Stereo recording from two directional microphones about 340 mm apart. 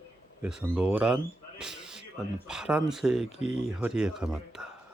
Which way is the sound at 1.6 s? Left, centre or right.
Centre.